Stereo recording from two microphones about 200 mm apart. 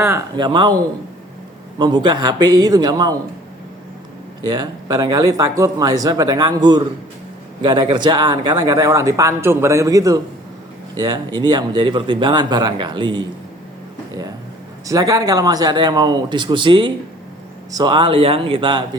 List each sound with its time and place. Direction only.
0.0 s speech: 15° right (ahead or behind)
1.8 s speech: 20° right (ahead or behind)
4.4 s speech: 20° right (ahead or behind)
14.8 s speech: 15° right (ahead or behind)